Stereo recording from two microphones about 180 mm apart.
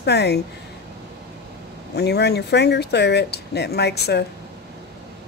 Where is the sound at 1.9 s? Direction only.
65° left (ahead or behind).